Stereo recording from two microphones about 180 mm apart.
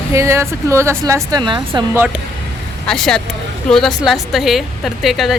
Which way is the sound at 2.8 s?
5° left (ahead or behind).